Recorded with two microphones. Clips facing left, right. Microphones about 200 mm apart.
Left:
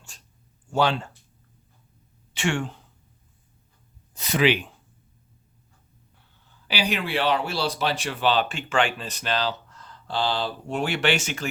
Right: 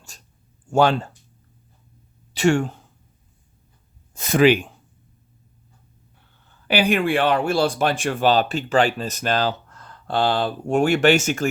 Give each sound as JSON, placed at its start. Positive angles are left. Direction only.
{"t": 0.1, "sound": "a sound", "side_deg": -45}
{"t": 0.7, "sound": "speech", "side_deg": -45}
{"t": 2.3, "sound": "speech", "side_deg": -40}
{"t": 4.1, "sound": "speech", "side_deg": -50}
{"t": 6.7, "sound": "speech", "side_deg": -55}